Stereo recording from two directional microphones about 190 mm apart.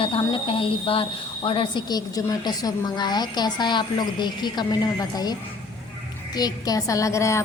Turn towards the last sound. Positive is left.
turn(degrees=15)  # may be behind; listen again after turning